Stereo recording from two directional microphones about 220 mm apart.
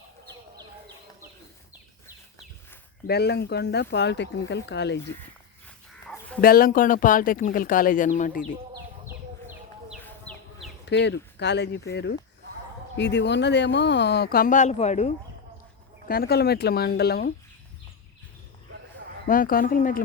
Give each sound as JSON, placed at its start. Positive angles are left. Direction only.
{"t": 3.1, "sound": "speech", "side_deg": 45}
{"t": 6.1, "sound": "chicken", "side_deg": 5}
{"t": 6.4, "sound": "speech", "side_deg": 40}
{"t": 10.0, "sound": "chicken", "side_deg": 5}
{"t": 10.8, "sound": "speech", "side_deg": 50}
{"t": 16.0, "sound": "speech", "side_deg": 45}
{"t": 19.3, "sound": "speech", "side_deg": 40}